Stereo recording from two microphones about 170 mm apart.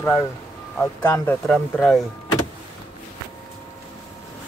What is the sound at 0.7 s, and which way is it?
Speech, 15° left (ahead or behind).